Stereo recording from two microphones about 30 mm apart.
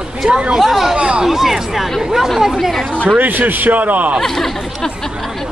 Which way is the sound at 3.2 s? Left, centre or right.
Right.